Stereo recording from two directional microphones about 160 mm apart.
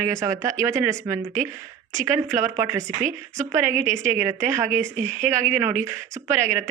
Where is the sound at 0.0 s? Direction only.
15° right (ahead or behind).